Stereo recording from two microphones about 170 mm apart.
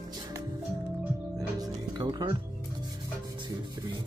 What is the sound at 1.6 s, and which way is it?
Music, 25° right (ahead or behind).